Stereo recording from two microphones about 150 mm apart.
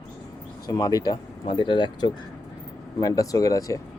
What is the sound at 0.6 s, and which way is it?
Speech, 25° left (ahead or behind).